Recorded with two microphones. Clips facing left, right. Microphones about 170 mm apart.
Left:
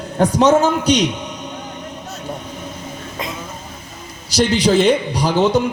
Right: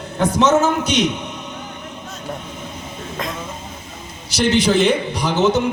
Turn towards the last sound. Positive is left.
turn(degrees=35)  # may be behind; listen again after turning